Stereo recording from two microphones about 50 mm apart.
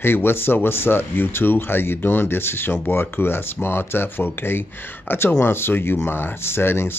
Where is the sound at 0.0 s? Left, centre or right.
Left.